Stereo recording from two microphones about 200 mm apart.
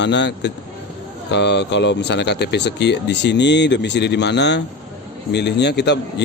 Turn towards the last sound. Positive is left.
turn(degrees=60)  # may be behind; listen again after turning